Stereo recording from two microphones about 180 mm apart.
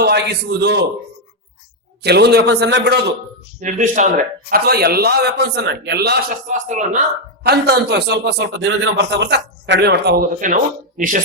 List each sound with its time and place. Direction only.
0.0 s a man's voice: 65° right (ahead or behind)
2.0 s a man's voice: 65° right (ahead or behind)
3.6 s speech: 45° right (ahead or behind)
4.5 s a man's voice: 60° right (ahead or behind)
6.3 s speech: 45° right (ahead or behind)
7.4 s a man's voice: 65° right (ahead or behind)
10.4 s speech: 45° right (ahead or behind)